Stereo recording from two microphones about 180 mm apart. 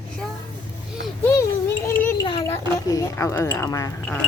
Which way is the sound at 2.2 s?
25° left (ahead or behind).